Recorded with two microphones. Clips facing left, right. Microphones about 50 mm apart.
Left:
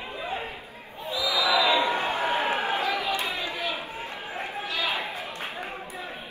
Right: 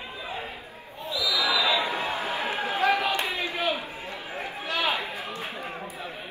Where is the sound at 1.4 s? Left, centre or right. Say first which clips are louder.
Left 4 dB; left.